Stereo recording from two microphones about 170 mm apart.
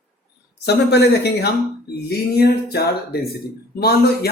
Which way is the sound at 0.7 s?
70° left (ahead or behind).